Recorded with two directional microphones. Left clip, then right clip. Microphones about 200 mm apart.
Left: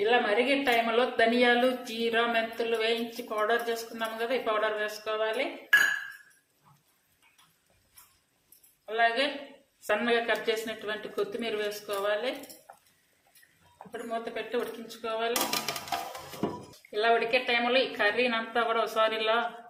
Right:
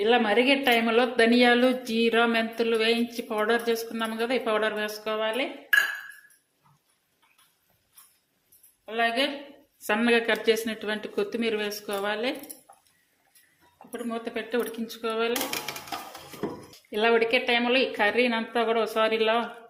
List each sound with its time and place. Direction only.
0.0 s a woman's voice: 50° right (ahead or behind)
8.9 s a woman's voice: 55° right (ahead or behind)
14.1 s a woman's voice: 45° right (ahead or behind)
16.9 s a woman's voice: 40° right (ahead or behind)